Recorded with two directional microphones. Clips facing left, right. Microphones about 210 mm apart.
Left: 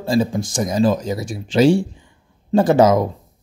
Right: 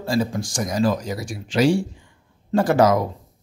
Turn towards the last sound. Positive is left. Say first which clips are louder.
# left 4 dB
turn(degrees=20)  # may be behind; listen again after turning